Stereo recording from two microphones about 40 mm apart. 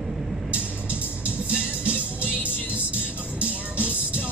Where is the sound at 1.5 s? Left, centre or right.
Right.